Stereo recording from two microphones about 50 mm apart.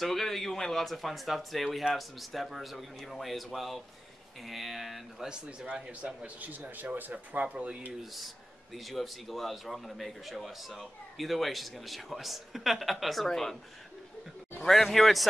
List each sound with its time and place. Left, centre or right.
0.0 s a man's voice: centre
5.3 s speech: right
8.0 s a man's voice: centre
14.6 s a man's voice: centre